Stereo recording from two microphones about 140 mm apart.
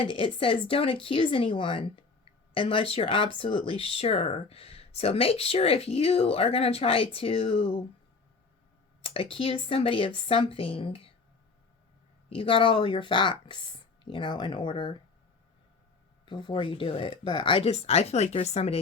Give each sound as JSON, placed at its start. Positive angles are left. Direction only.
{"t": 0.0, "sound": "speech", "side_deg": 40}
{"t": 9.0, "sound": "speech", "side_deg": 40}
{"t": 12.3, "sound": "speech", "side_deg": 40}
{"t": 16.2, "sound": "speech", "side_deg": 35}
{"t": 17.7, "sound": "speech", "side_deg": 50}